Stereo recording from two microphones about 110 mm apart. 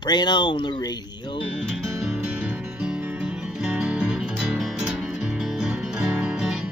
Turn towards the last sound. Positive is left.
turn(degrees=-10)  # may be behind; listen again after turning